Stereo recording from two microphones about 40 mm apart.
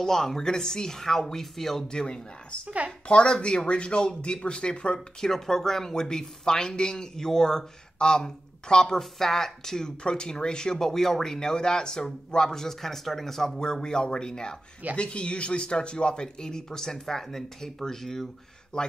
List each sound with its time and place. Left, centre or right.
0.0 s speech: centre
1.9 s speech: centre
4.9 s speech: centre
13.6 s speech: centre
18.7 s speech: left